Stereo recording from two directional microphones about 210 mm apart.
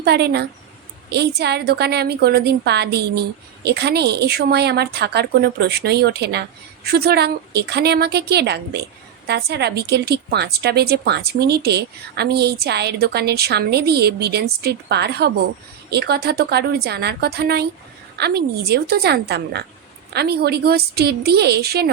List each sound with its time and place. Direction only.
0.0 s a woman's voice: 50° right (ahead or behind)